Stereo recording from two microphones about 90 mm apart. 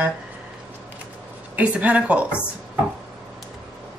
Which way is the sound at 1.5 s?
15° right (ahead or behind).